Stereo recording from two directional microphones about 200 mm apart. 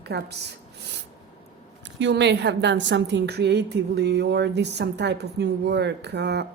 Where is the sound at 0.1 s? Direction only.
55° right (ahead or behind).